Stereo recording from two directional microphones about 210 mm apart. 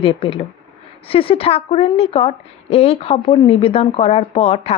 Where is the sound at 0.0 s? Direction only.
25° left (ahead or behind).